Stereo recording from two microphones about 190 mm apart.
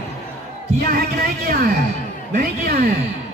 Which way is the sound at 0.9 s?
55° right (ahead or behind).